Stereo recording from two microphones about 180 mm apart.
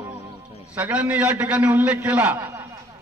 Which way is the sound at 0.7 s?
10° right (ahead or behind).